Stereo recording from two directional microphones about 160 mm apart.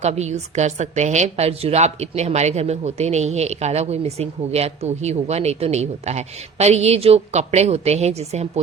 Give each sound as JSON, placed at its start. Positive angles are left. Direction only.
{"t": 0.0, "sound": "a woman's voice", "side_deg": -45}